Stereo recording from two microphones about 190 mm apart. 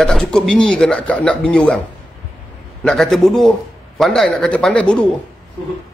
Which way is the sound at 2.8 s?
Centre (ahead or behind).